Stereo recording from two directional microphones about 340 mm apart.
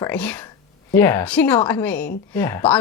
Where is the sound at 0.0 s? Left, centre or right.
Centre.